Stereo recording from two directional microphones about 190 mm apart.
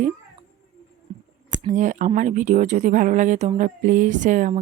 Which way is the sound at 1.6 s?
40° right (ahead or behind).